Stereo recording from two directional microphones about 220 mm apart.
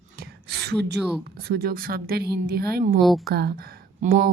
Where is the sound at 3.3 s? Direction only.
45° right (ahead or behind).